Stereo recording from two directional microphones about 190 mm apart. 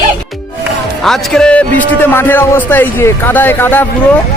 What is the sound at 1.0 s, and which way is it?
A man's voice, 5° left (ahead or behind).